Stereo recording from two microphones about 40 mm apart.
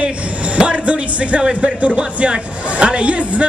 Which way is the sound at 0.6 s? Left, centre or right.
Right.